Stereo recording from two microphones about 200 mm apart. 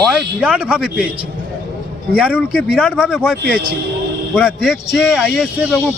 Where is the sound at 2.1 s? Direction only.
5° right (ahead or behind).